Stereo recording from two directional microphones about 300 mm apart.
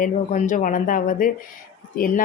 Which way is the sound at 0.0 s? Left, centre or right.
Left.